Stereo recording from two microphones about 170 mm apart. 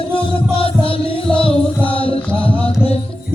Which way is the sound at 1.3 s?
35° left (ahead or behind).